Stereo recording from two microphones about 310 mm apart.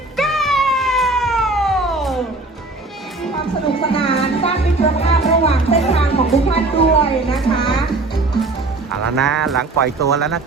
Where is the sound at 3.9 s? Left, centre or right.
Centre.